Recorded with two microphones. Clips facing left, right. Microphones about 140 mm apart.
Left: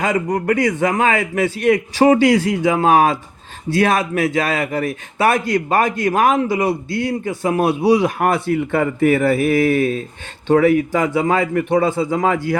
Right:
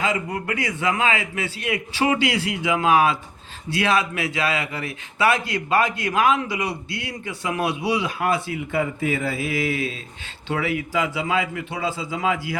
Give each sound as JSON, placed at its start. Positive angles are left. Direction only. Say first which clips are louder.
{"t": 0.0, "sound": "a man's voice", "louder": "left 6 dB", "side_deg": 45}